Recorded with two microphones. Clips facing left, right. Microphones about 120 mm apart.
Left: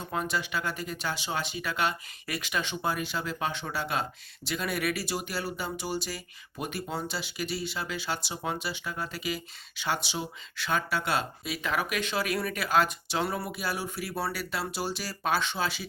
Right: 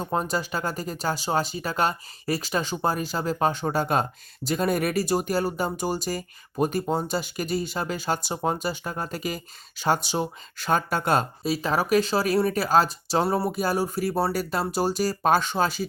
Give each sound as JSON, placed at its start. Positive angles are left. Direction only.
{"t": 0.0, "sound": "speech", "side_deg": -40}